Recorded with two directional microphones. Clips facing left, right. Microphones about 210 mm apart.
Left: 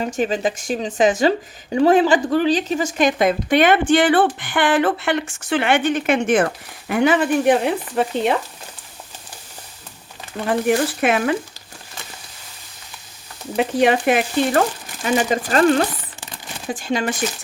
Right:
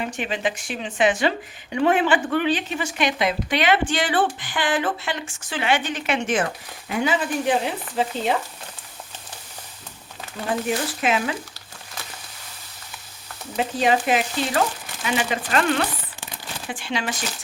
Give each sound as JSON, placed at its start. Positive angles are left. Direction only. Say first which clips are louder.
{"t": 0.0, "sound": "speech", "louder": "left 5 dB", "side_deg": 40}
{"t": 10.5, "sound": "speech", "louder": "left 6 dB", "side_deg": 60}
{"t": 13.6, "sound": "speech", "louder": "left 4 dB", "side_deg": 60}
{"t": 15.0, "sound": "speech", "louder": "left 6 dB", "side_deg": 40}